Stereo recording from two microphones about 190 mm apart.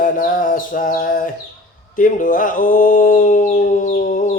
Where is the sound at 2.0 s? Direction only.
45° left (ahead or behind).